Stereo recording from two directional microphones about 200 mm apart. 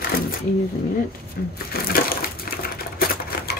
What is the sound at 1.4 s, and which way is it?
Speech, 50° left (ahead or behind).